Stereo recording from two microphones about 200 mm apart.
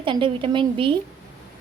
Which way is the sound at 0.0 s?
25° right (ahead or behind).